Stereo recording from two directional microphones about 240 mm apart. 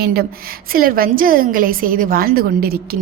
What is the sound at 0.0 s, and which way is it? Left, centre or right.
A woman's voice, right.